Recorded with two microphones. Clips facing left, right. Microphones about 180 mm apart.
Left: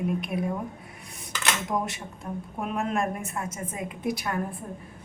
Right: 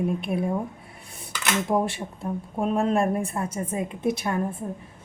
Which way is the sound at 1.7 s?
30° right (ahead or behind).